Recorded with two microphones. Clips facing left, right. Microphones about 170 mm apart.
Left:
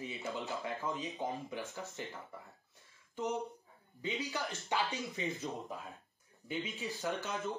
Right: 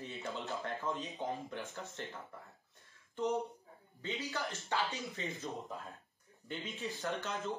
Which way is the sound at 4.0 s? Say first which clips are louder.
Left 1 dB; 20° left (ahead or behind).